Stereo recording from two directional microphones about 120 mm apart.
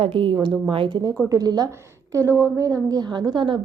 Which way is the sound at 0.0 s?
50° right (ahead or behind).